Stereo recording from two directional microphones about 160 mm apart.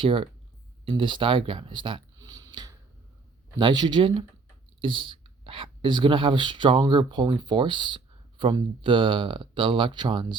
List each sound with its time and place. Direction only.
0.0 s speech: 35° right (ahead or behind)
2.1 s a sound: 20° right (ahead or behind)
3.6 s speech: 30° right (ahead or behind)